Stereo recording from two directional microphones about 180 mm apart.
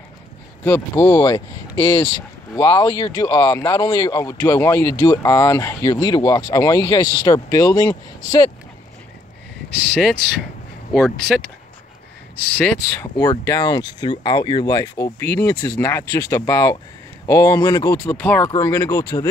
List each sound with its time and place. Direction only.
0.7 s speech: 15° left (ahead or behind)
1.2 s speech: 25° left (ahead or behind)
9.7 s speech: 5° left (ahead or behind)